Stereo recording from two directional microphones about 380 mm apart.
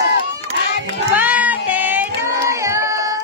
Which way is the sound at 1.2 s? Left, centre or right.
Centre.